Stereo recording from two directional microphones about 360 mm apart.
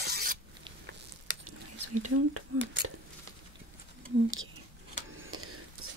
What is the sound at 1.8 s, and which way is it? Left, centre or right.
Speech, right.